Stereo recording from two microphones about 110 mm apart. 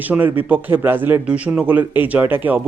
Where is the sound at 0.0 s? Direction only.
15° right (ahead or behind).